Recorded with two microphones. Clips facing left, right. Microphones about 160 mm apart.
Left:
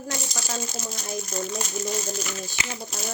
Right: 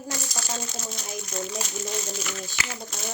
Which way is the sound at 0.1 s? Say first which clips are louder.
Left 1 dB; 20° left (ahead or behind).